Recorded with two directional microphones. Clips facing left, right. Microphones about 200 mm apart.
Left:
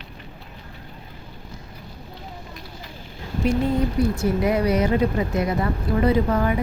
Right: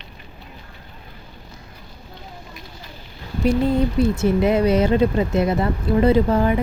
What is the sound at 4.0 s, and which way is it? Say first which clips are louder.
Speech: right 3 dB; 25° right (ahead or behind).